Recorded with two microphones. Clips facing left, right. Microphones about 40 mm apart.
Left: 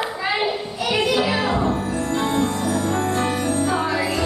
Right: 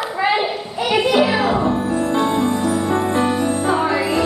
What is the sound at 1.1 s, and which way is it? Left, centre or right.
Music, centre.